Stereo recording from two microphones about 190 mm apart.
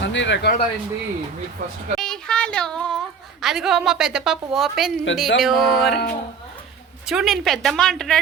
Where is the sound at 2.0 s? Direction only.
5° left (ahead or behind).